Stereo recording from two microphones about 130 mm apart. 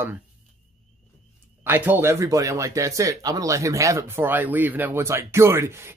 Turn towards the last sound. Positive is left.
turn(degrees=-20)  # may be behind; listen again after turning